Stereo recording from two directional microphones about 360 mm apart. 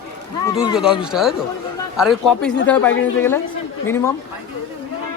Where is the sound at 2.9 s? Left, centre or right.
Left.